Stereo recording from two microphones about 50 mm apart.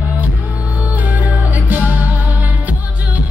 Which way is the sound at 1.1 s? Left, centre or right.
Right.